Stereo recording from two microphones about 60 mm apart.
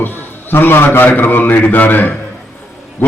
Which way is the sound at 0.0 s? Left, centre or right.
Left.